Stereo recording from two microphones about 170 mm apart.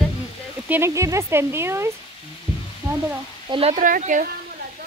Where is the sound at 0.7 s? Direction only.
15° right (ahead or behind).